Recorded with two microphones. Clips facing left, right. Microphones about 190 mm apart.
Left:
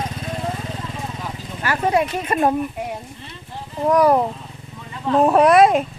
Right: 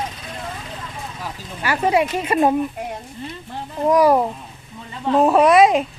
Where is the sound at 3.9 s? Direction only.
10° right (ahead or behind).